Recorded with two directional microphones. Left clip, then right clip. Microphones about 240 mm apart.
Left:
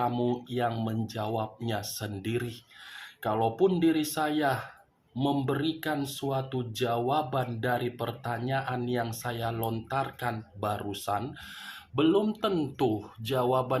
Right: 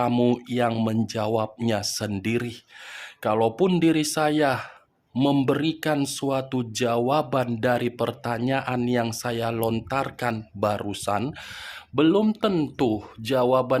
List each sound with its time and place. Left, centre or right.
0.0 s speech: right